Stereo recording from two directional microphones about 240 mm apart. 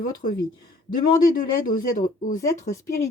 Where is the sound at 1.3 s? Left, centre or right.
Left.